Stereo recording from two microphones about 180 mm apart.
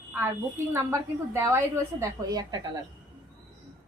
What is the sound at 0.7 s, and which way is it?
A woman's voice, 15° right (ahead or behind).